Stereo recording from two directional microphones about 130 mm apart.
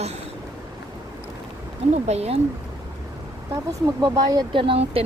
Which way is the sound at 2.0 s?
55° right (ahead or behind).